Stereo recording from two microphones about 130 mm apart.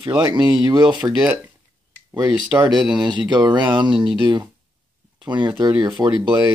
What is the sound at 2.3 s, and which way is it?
Speech, 5° right (ahead or behind).